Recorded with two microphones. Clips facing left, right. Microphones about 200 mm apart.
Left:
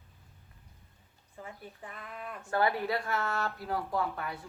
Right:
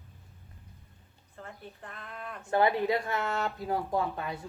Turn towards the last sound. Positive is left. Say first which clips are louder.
# right 2 dB
turn(degrees=-20)  # may be behind; listen again after turning